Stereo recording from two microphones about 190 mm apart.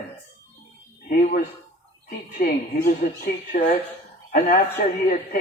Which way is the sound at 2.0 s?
45° left (ahead or behind).